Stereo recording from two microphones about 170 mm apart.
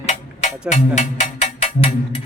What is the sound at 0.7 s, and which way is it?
Cowbell, 45° left (ahead or behind).